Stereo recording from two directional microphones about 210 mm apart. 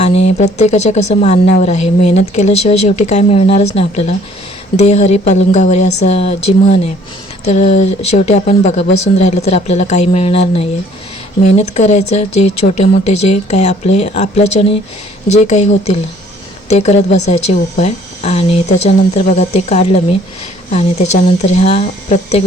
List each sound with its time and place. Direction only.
0.0 s speech: 30° left (ahead or behind)
21.4 s speech: 30° left (ahead or behind)